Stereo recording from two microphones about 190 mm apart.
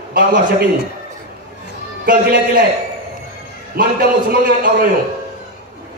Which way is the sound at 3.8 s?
50° right (ahead or behind).